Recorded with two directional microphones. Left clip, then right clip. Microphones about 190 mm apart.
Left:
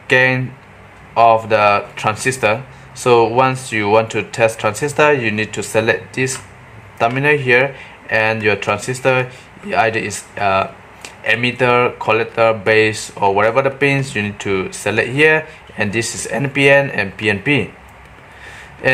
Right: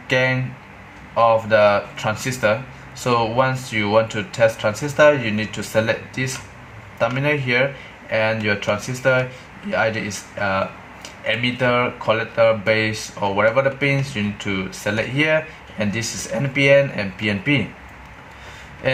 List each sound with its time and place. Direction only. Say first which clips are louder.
0.1 s speech: left 6 dB; 25° left (ahead or behind)